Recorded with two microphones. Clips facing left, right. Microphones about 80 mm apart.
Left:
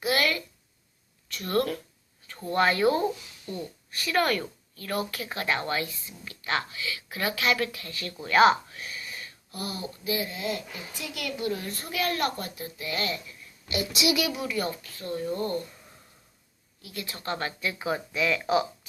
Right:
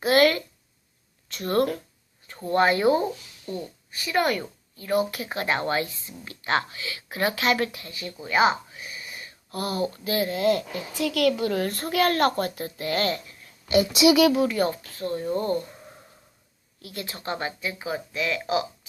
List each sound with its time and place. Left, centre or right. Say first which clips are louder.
0.0 s a sound: right 7 dB; right
1.3 s speech: right 3 dB; right
9.5 s a child's voice: right 9 dB; right
13.2 s speech: right 1 dB; right
16.8 s speech: right 2 dB; right; by 17.5 s centre
17.6 s speech: left 1 dB; centre